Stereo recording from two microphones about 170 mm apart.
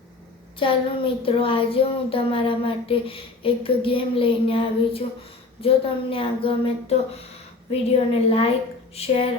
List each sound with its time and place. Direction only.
0.6 s speech: 30° left (ahead or behind)